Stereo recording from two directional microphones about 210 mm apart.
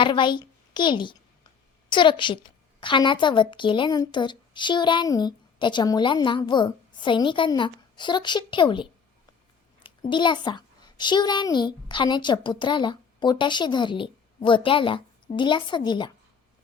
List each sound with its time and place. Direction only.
0.0 s a woman's voice: 20° left (ahead or behind)
10.1 s a woman's voice: 20° left (ahead or behind)